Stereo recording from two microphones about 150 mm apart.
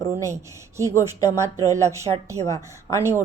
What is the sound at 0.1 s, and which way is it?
A woman's voice, 20° right (ahead or behind).